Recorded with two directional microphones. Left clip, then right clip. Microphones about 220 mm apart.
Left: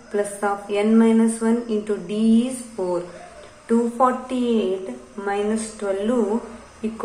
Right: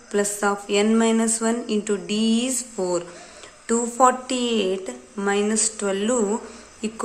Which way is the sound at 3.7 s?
40° right (ahead or behind).